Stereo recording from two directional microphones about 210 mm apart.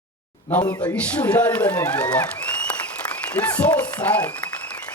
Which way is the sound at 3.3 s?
10° left (ahead or behind).